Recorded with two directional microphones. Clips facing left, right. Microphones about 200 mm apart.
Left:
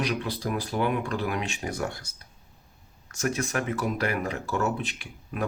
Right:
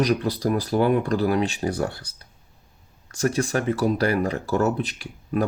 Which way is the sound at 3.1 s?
35° right (ahead or behind).